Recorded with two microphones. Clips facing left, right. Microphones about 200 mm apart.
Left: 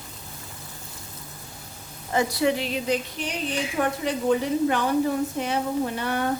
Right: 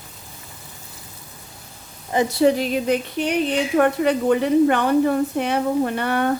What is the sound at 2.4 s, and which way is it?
A woman's voice, 40° right (ahead or behind).